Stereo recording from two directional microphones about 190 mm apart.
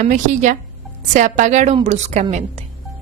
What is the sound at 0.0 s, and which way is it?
A woman's voice, 40° right (ahead or behind).